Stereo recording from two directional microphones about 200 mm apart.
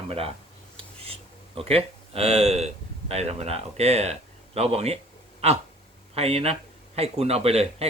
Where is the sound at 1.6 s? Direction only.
30° right (ahead or behind).